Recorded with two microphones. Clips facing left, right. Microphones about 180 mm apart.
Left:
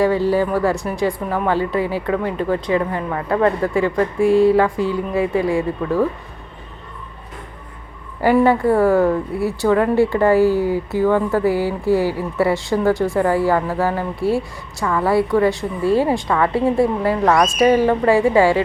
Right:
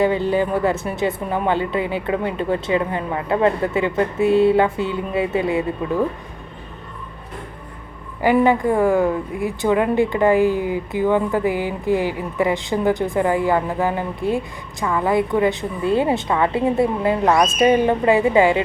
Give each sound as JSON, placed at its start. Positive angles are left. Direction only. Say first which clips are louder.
{"t": 0.3, "sound": "speech", "louder": "left 1 dB", "side_deg": -20}
{"t": 8.2, "sound": "a woman's voice", "louder": "left 1 dB", "side_deg": -15}
{"t": 10.6, "sound": "speech", "louder": "left 3 dB", "side_deg": 35}
{"t": 11.0, "sound": "a woman's voice", "louder": "left 2 dB", "side_deg": -15}
{"t": 11.9, "sound": "speech", "louder": "left 3 dB", "side_deg": 35}
{"t": 12.4, "sound": "speech", "louder": "left 2 dB", "side_deg": -15}